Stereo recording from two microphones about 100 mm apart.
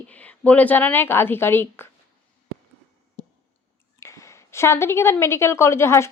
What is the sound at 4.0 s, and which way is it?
A woman's voice, 30° left (ahead or behind).